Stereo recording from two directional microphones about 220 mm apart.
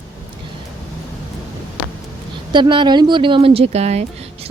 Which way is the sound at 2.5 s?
20° right (ahead or behind).